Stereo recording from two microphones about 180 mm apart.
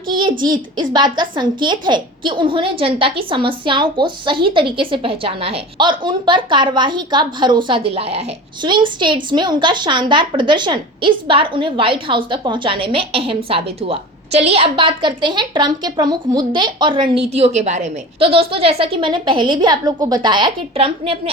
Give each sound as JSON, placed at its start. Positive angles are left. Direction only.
{"t": 0.1, "sound": "a child's voice", "side_deg": -25}